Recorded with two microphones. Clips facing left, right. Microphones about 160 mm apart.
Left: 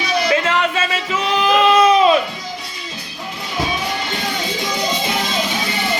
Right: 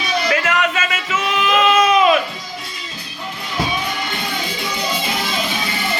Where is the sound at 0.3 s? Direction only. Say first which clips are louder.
Even; 30° left (ahead or behind).